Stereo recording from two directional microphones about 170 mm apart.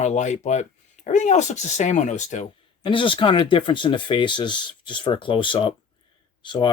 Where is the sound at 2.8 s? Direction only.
30° left (ahead or behind).